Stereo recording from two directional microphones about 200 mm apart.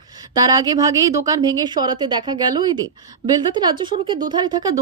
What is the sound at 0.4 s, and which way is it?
A woman's voice, 20° right (ahead or behind).